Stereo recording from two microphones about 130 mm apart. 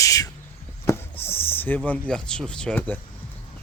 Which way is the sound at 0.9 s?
25° left (ahead or behind).